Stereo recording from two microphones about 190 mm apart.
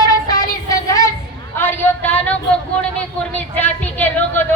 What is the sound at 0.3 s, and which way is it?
Child singing, 20° left (ahead or behind).